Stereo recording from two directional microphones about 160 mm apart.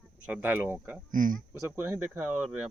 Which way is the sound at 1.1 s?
55° right (ahead or behind).